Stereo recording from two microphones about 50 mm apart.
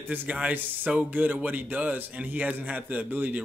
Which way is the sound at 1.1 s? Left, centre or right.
Right.